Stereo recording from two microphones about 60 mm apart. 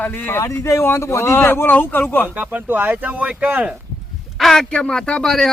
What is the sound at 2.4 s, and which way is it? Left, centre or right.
Speech, right.